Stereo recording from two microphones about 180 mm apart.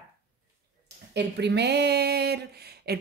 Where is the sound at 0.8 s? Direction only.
70° right (ahead or behind).